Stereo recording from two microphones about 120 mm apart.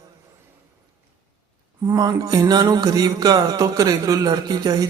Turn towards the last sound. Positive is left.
turn(degrees=-35)  # may be behind; listen again after turning